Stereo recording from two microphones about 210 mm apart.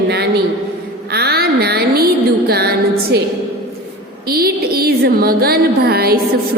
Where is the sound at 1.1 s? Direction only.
50° right (ahead or behind).